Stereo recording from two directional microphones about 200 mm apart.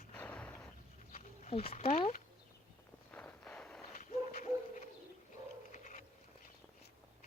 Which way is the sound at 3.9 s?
40° left (ahead or behind).